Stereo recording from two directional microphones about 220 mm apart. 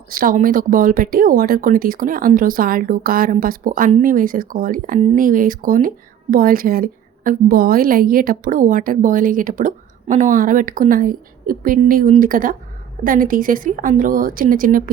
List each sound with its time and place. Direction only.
0.1 s a woman's voice: 40° right (ahead or behind)